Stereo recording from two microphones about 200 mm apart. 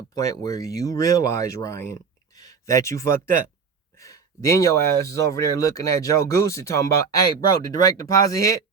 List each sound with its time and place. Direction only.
0.2 s speech: 15° left (ahead or behind)